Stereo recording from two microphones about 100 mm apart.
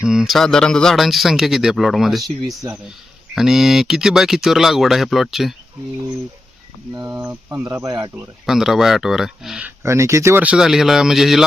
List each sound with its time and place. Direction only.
0.0 s a man's voice: 5° right (ahead or behind)
6.9 s speech: 30° right (ahead or behind)
7.2 s speech: 15° right (ahead or behind)
7.6 s speech: 35° right (ahead or behind)
8.4 s a man's voice: 5° right (ahead or behind)
9.8 s speech: 30° right (ahead or behind)
10.4 s a man's voice: 10° right (ahead or behind)